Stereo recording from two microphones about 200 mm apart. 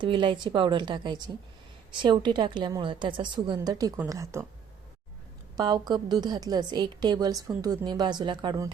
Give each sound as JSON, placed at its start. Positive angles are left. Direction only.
{"t": 0.0, "sound": "a woman's voice", "side_deg": -25}
{"t": 5.5, "sound": "a woman's voice", "side_deg": -20}